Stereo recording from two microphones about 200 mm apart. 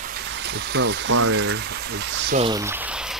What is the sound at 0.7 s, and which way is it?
Speech, 70° right (ahead or behind).